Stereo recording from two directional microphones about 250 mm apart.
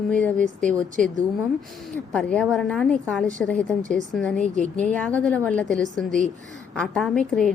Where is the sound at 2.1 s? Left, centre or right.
Centre.